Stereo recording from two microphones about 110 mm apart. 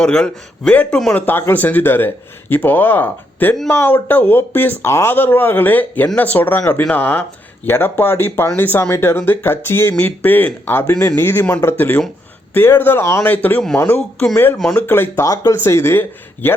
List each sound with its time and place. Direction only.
0.0 s speech: 5° left (ahead or behind)
1.3 s speech: 20° left (ahead or behind)
13.7 s speech: 25° left (ahead or behind)
14.6 s speech: 10° left (ahead or behind)
14.8 s speech: 20° left (ahead or behind)